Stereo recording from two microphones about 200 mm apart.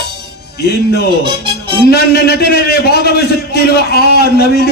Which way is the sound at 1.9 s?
50° left (ahead or behind).